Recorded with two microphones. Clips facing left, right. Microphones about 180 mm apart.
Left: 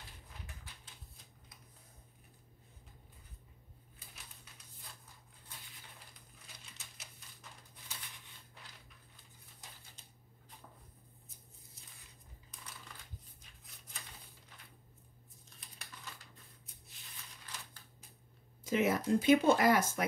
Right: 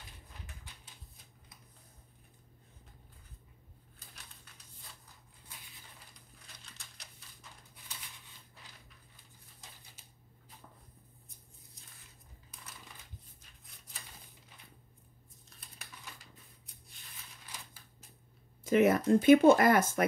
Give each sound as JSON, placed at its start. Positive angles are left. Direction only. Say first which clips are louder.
{"t": 15.5, "sound": "crumpling", "louder": "right 1 dB", "side_deg": 0}
{"t": 16.6, "sound": "a sound", "louder": "even", "side_deg": 0}
{"t": 18.6, "sound": "speech", "louder": "right 6 dB", "side_deg": -55}